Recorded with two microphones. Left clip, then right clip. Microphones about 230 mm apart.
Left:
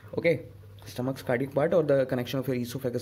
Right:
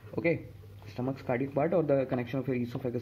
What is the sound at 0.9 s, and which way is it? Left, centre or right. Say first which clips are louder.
A man's voice: left 4 dB; left.